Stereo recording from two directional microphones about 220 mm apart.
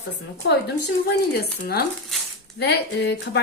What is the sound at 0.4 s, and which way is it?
Speech, 45° left (ahead or behind).